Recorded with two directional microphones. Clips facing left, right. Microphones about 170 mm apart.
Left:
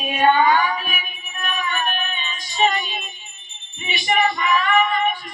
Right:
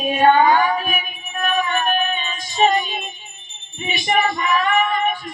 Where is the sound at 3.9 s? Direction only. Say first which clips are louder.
Right 1 dB; 45° right (ahead or behind).